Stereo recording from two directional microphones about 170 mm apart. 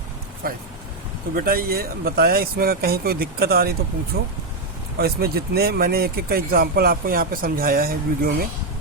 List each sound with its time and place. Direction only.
0.4 s speech: 60° right (ahead or behind)